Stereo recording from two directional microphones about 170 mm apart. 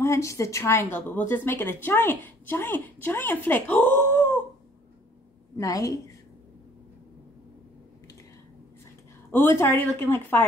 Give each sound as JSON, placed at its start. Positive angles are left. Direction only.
{"t": 0.0, "sound": "a woman's voice", "side_deg": 15}
{"t": 5.6, "sound": "a woman's voice", "side_deg": 20}
{"t": 9.3, "sound": "a woman's voice", "side_deg": 15}